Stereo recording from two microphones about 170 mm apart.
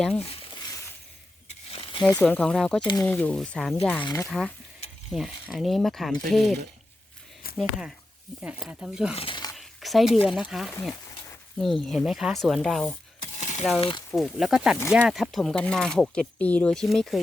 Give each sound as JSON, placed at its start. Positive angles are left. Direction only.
{"t": 0.0, "sound": "speech", "side_deg": 5}
{"t": 0.3, "sound": "frying", "side_deg": 35}
{"t": 2.0, "sound": "speech", "side_deg": 15}
{"t": 2.8, "sound": "speech", "side_deg": 20}
{"t": 3.1, "sound": "speech", "side_deg": 10}
{"t": 4.0, "sound": "speech", "side_deg": 20}
{"t": 4.3, "sound": "speech", "side_deg": 0}
{"t": 9.1, "sound": "a sound", "side_deg": 30}
{"t": 9.6, "sound": "a sound", "side_deg": 0}
{"t": 10.5, "sound": "speech", "side_deg": 0}
{"t": 13.4, "sound": "a sound", "side_deg": 45}
{"t": 13.7, "sound": "speech", "side_deg": 30}
{"t": 14.1, "sound": "speech", "side_deg": 0}